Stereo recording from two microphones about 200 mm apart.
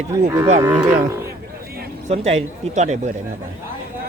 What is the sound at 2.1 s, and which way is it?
Speech, 30° right (ahead or behind).